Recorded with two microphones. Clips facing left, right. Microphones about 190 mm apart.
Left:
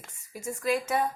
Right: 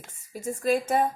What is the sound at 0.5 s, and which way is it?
Speech, 45° right (ahead or behind).